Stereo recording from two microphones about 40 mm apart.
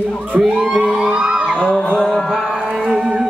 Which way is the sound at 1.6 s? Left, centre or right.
Left.